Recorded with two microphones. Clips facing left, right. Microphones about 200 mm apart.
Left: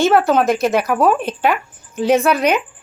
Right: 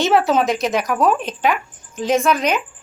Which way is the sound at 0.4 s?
55° left (ahead or behind).